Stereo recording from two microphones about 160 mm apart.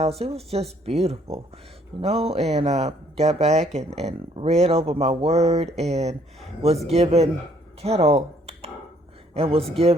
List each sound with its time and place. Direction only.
0.0 s speech: 40° right (ahead or behind)
7.8 s a sound: 40° right (ahead or behind)
9.3 s speech: 35° right (ahead or behind)